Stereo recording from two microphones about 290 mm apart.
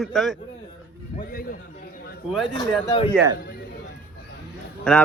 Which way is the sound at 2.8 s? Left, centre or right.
Centre.